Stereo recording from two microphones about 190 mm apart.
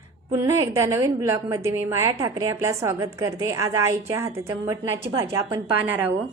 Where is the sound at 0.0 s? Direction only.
15° right (ahead or behind).